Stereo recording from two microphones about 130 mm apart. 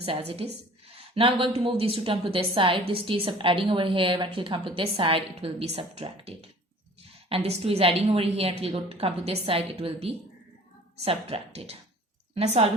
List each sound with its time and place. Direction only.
0.0 s a woman's voice: 50° right (ahead or behind)